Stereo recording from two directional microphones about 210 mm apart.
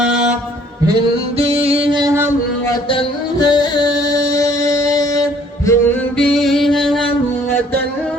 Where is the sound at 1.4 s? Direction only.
30° right (ahead or behind); by 2.3 s 15° right (ahead or behind).